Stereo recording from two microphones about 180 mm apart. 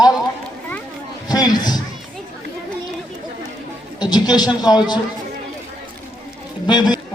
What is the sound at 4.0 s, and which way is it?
A man's voice, 25° left (ahead or behind).